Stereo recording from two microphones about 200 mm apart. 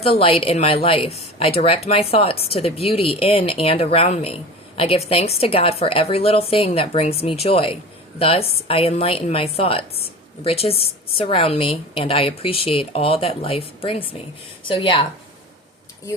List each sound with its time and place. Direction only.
0.0 s a woman's voice: 30° left (ahead or behind)